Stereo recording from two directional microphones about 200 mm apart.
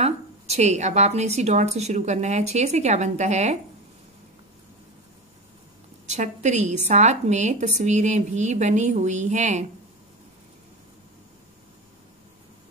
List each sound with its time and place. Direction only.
0.0 s a woman's voice: 35° right (ahead or behind)
6.0 s a woman's voice: 35° right (ahead or behind)